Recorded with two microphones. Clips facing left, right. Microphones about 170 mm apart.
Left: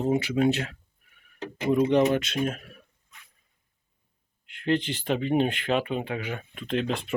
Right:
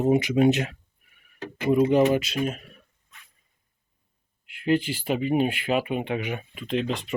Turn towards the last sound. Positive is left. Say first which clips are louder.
# even
turn(degrees=0)  # may be behind; listen again after turning